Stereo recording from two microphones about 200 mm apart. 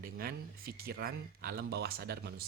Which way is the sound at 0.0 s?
50° right (ahead or behind).